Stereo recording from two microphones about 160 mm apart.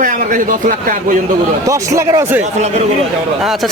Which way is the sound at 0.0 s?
55° right (ahead or behind).